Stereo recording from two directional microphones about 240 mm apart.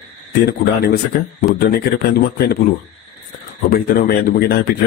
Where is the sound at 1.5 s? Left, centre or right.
Left.